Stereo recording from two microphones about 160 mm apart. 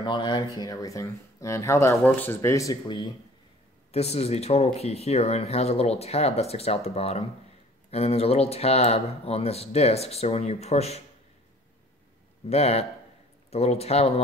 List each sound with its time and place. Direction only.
0.0 s speech: 30° left (ahead or behind)
3.9 s speech: 40° left (ahead or behind)
12.4 s speech: 40° left (ahead or behind)